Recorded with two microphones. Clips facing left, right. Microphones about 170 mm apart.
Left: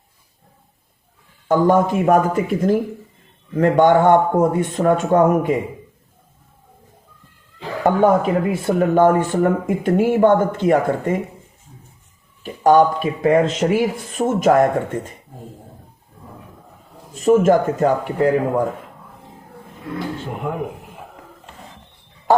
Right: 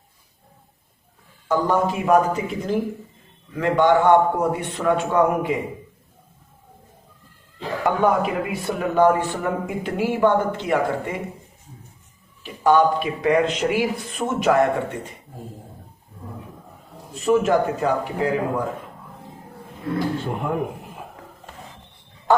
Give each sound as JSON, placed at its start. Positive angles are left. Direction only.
{"t": 1.5, "sound": "speech", "side_deg": 50}
{"t": 7.9, "sound": "speech", "side_deg": 45}
{"t": 12.4, "sound": "speech", "side_deg": 45}
{"t": 17.2, "sound": "speech", "side_deg": 45}